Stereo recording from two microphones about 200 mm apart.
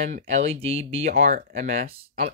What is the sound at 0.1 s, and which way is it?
Speech, 35° right (ahead or behind).